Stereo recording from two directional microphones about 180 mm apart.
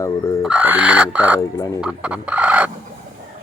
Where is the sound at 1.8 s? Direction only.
5° right (ahead or behind).